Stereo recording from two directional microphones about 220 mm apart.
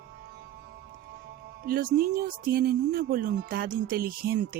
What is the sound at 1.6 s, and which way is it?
Speech, 40° right (ahead or behind).